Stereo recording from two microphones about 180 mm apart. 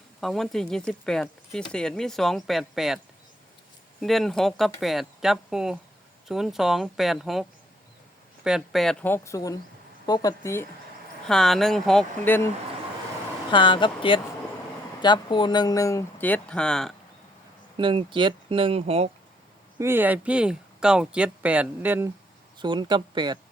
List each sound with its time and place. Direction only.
0.2 s speech: centre (ahead or behind)
4.0 s speech: centre (ahead or behind)
8.4 s speech: centre (ahead or behind); by 10.7 s 15° left (ahead or behind)
11.3 s speech: centre (ahead or behind)
13.5 s speech: 25° left (ahead or behind); by 16.9 s 5° left (ahead or behind)
17.7 s speech: 25° right (ahead or behind)
19.8 s speech: 10° right (ahead or behind)
22.5 s speech: 25° right (ahead or behind)